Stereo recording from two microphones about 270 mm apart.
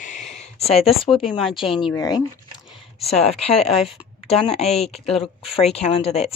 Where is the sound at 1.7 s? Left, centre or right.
Centre.